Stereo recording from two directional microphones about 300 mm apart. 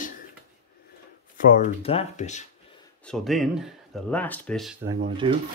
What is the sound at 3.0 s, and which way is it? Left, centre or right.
Speech, centre.